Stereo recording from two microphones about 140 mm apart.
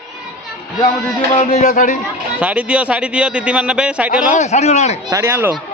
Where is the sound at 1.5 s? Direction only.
65° left (ahead or behind).